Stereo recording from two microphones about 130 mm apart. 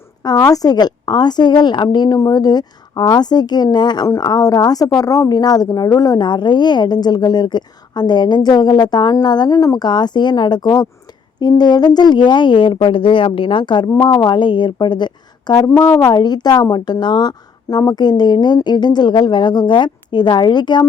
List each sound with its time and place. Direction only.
0.2 s speech: 30° left (ahead or behind)